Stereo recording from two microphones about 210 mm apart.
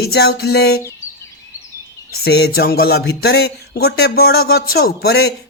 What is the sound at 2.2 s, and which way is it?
Speech, 50° left (ahead or behind).